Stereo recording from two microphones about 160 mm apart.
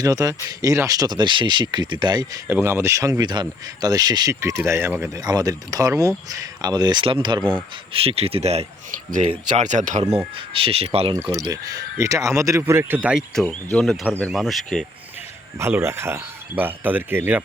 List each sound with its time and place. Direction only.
0.0 s speech: 20° right (ahead or behind)
2.5 s speech: 15° right (ahead or behind); by 10.2 s 45° right (ahead or behind)
10.3 s speech: 35° right (ahead or behind)
11.2 s speech: 20° right (ahead or behind)
13.4 s speech: 10° left (ahead or behind)
15.5 s speech: 15° right (ahead or behind)